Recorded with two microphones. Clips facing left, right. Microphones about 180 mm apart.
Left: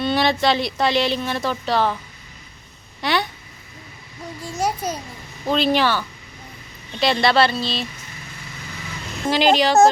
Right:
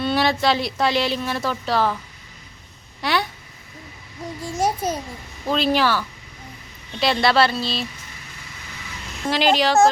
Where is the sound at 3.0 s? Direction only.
Centre (ahead or behind).